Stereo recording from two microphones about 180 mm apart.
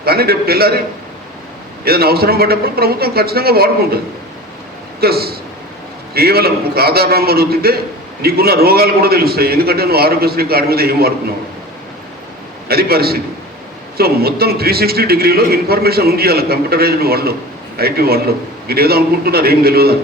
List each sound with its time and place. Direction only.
0.0 s a man's voice: 60° right (ahead or behind)
1.8 s a man's voice: 60° right (ahead or behind)
12.6 s a man's voice: 60° right (ahead or behind)